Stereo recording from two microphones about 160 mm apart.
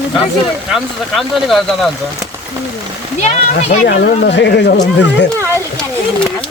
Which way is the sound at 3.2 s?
45° left (ahead or behind).